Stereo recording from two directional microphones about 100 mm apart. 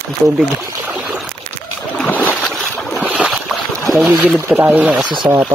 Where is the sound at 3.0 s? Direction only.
10° right (ahead or behind).